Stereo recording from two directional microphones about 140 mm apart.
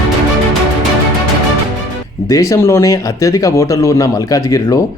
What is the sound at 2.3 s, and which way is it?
Speech, 25° left (ahead or behind).